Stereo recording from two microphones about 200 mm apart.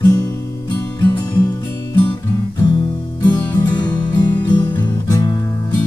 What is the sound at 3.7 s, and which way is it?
Music, 20° left (ahead or behind).